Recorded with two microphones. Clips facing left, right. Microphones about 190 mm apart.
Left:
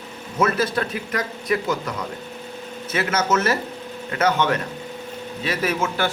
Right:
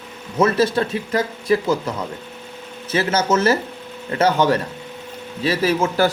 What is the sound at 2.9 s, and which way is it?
A man's voice, 30° right (ahead or behind).